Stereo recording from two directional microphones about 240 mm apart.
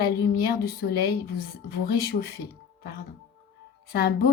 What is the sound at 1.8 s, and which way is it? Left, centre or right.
Speech, left.